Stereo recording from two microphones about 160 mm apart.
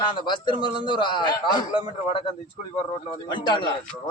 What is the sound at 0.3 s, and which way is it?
Speech, 30° left (ahead or behind).